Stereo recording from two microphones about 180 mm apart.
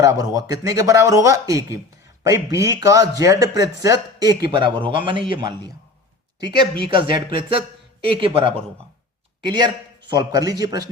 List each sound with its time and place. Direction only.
0.0 s speech: 20° right (ahead or behind)